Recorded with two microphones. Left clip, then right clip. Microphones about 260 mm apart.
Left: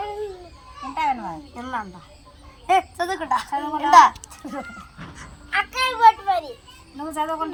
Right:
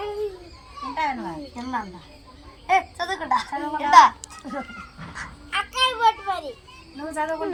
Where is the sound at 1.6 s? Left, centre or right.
Centre.